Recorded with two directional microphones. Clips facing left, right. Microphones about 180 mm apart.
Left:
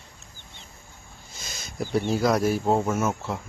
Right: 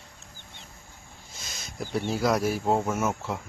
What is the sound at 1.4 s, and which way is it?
Speech, centre (ahead or behind).